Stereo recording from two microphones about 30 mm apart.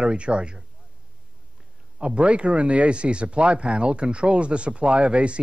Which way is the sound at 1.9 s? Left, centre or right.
Right.